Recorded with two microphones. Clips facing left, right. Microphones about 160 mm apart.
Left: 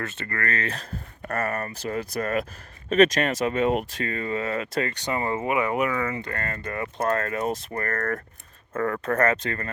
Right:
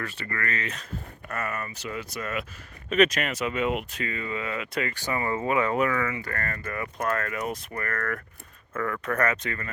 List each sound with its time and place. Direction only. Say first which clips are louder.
0.3 s speech: left 4 dB; 40° left (ahead or behind)
1.3 s speech: left 5 dB; 45° left (ahead or behind)
5.0 s speech: right 2 dB; 20° left (ahead or behind)